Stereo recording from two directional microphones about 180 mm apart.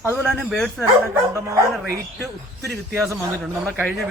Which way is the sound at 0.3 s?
Centre (ahead or behind).